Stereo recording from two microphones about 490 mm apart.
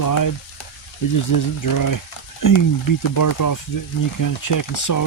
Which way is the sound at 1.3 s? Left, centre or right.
Left.